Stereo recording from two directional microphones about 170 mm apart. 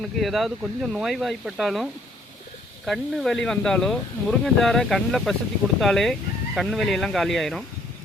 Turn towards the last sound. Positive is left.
turn(degrees=0)  # may be behind; listen again after turning